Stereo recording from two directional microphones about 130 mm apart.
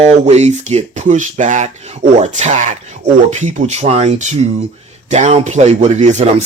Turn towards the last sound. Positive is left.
turn(degrees=-60)  # may be behind; listen again after turning